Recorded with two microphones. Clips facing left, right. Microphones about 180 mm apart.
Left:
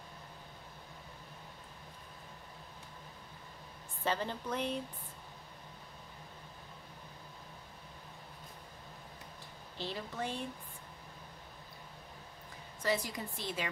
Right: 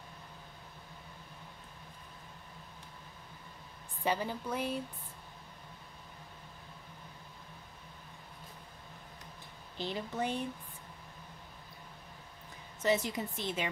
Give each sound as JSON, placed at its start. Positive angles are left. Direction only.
{"t": 4.0, "sound": "a woman's voice", "side_deg": -10}
{"t": 9.8, "sound": "a woman's voice", "side_deg": -15}
{"t": 12.8, "sound": "a woman's voice", "side_deg": -20}